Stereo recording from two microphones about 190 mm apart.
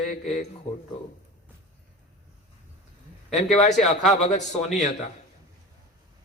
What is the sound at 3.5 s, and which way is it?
A man's voice, 40° left (ahead or behind).